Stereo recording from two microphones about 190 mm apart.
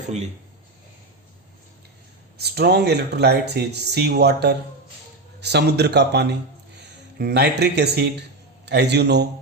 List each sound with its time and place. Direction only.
2.4 s speech: 60° right (ahead or behind)